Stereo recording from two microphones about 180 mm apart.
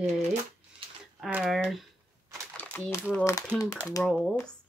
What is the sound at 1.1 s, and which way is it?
Speech, 5° right (ahead or behind).